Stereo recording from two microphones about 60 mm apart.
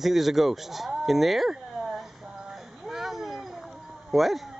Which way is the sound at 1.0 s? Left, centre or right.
Centre.